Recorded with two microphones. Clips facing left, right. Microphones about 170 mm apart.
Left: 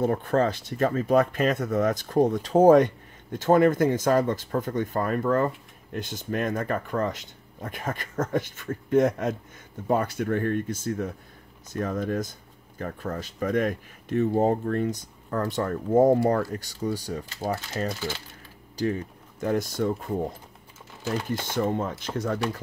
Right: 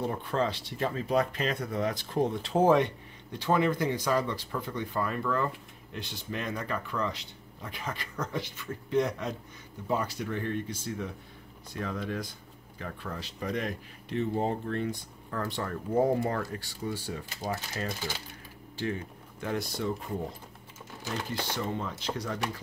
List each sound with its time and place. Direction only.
0.0 s speech: 50° left (ahead or behind)
21.3 s speech: 50° left (ahead or behind)